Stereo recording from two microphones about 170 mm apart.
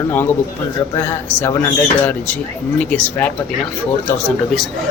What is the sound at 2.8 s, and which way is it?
Speech, 10° left (ahead or behind).